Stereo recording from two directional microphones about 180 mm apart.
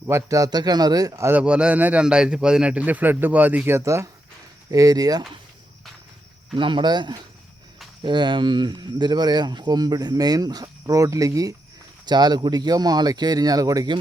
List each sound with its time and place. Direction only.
0.1 s a man's voice: 20° right (ahead or behind)
6.6 s speech: 25° right (ahead or behind)